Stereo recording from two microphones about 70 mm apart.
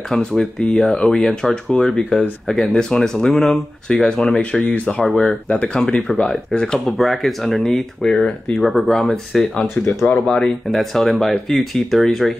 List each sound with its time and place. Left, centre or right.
0.1 s speech: centre
5.0 s speech: centre
8.5 s speech: centre